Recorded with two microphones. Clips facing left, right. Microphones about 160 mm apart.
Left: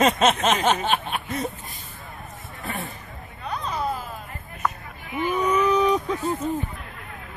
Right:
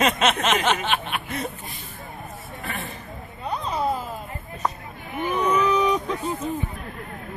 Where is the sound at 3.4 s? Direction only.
25° right (ahead or behind).